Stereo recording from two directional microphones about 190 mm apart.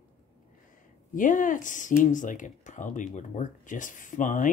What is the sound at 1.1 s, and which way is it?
Speech, 45° left (ahead or behind).